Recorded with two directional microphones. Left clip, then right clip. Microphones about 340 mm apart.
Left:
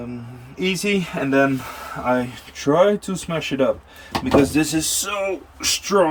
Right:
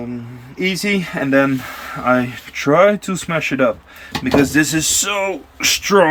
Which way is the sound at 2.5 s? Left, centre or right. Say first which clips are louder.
Right 4 dB; centre.